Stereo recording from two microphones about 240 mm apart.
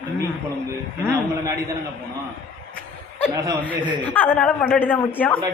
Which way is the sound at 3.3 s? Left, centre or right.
Centre.